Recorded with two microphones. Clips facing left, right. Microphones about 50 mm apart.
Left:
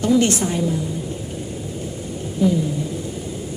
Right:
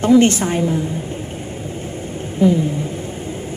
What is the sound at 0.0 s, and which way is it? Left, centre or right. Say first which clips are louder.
Speech: right 5 dB; right.